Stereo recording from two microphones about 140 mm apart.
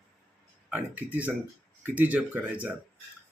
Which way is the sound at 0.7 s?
10° right (ahead or behind).